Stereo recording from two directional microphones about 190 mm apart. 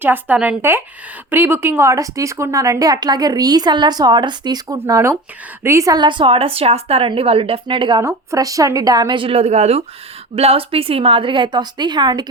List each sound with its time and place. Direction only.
0.0 s a woman's voice: 10° right (ahead or behind)